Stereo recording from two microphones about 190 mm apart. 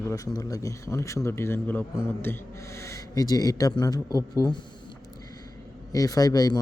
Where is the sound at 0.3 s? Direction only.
20° left (ahead or behind).